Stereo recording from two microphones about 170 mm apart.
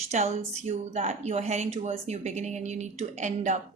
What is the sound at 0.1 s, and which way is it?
A woman's voice, 40° right (ahead or behind).